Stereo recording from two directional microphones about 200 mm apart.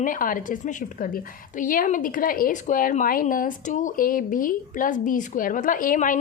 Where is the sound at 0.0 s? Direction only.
45° left (ahead or behind).